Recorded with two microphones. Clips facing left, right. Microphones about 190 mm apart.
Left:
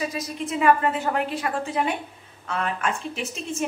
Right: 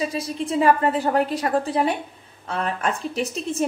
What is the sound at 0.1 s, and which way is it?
A woman's voice, 30° right (ahead or behind).